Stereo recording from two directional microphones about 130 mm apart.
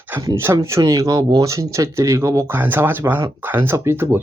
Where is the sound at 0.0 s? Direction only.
20° right (ahead or behind).